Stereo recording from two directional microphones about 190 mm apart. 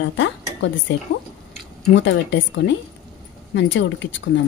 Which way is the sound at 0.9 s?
70° left (ahead or behind).